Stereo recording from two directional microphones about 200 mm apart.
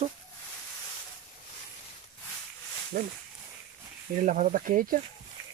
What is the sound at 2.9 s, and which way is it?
Speech, 40° right (ahead or behind).